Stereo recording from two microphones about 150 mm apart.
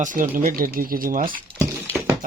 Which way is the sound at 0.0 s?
60° right (ahead or behind).